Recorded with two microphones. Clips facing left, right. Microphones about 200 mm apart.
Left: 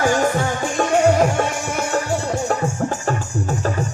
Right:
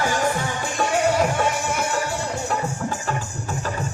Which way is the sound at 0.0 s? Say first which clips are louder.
Left 5 dB; 45° left (ahead or behind).